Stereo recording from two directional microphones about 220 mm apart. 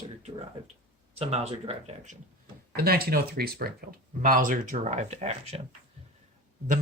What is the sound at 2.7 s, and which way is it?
Speech, 45° right (ahead or behind).